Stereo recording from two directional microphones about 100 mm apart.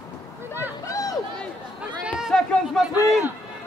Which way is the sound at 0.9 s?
35° left (ahead or behind).